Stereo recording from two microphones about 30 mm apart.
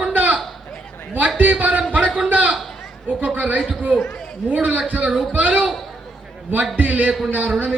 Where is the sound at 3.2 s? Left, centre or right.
Right.